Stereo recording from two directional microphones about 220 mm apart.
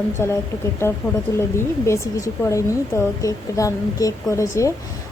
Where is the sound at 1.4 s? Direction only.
10° left (ahead or behind).